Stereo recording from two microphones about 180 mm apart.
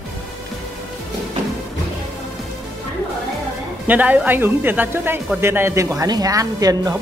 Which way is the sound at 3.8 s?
10° right (ahead or behind).